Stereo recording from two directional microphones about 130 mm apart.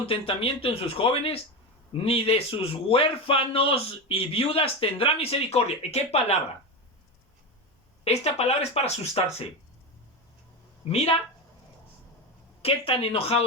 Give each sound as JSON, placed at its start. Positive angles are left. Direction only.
{"t": 0.0, "sound": "a man's voice", "side_deg": 45}
{"t": 8.0, "sound": "a man's voice", "side_deg": 55}
{"t": 10.8, "sound": "a man's voice", "side_deg": 50}
{"t": 12.6, "sound": "a man's voice", "side_deg": 50}